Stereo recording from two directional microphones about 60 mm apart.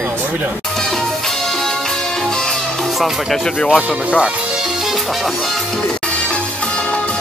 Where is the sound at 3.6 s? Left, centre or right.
Left.